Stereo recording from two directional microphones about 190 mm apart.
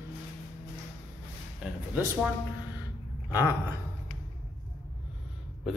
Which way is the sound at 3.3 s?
10° right (ahead or behind).